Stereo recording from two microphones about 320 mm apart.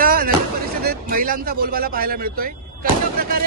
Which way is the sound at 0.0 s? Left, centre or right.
Right.